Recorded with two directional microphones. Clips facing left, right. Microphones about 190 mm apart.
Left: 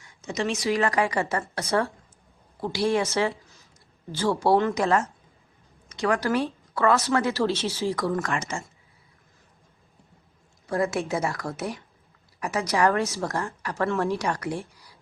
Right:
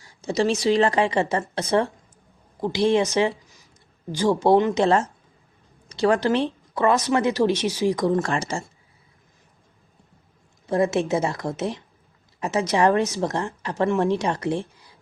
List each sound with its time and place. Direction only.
0.0 s a woman's voice: 35° right (ahead or behind)
8.2 s speech: 30° right (ahead or behind)
10.7 s a woman's voice: 20° right (ahead or behind)